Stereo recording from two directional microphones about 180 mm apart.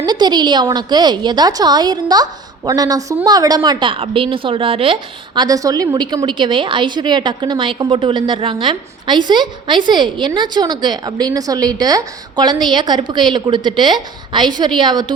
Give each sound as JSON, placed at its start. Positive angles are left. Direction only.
{"t": 0.0, "sound": "a woman's voice", "side_deg": -25}